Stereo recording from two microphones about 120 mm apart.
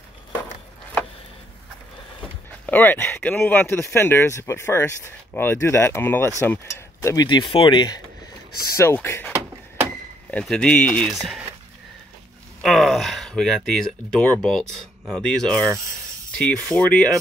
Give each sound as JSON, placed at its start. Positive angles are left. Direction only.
{"t": 2.6, "sound": "speech", "side_deg": 15}
{"t": 7.2, "sound": "speech", "side_deg": 40}
{"t": 8.7, "sound": "speech", "side_deg": 20}
{"t": 10.4, "sound": "speech", "side_deg": 5}
{"t": 11.1, "sound": "speech", "side_deg": 0}
{"t": 12.6, "sound": "speech", "side_deg": 0}